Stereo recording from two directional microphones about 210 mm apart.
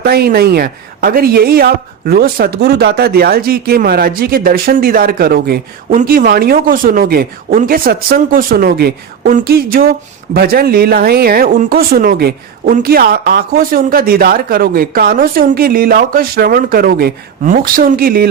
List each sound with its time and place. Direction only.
0.0 s speech: 45° right (ahead or behind)